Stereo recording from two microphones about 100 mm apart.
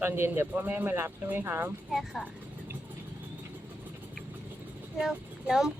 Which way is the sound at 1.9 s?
Centre (ahead or behind).